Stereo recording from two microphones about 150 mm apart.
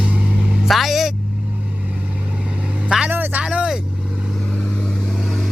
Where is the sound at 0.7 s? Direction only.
Centre (ahead or behind).